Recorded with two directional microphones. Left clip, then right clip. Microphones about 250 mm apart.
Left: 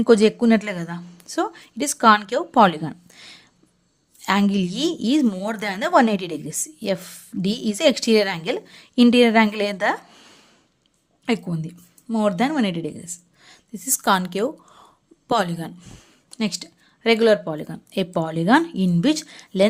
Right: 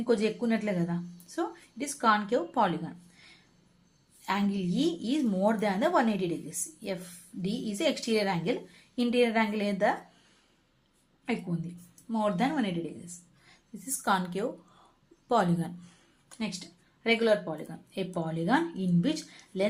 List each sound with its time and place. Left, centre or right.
0.0 s a woman's voice: left